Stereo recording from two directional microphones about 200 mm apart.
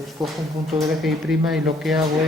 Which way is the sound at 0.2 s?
20° right (ahead or behind).